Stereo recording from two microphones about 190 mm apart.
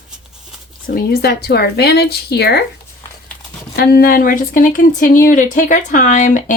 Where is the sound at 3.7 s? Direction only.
55° left (ahead or behind).